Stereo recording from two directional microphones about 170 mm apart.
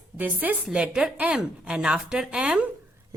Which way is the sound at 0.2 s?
10° right (ahead or behind).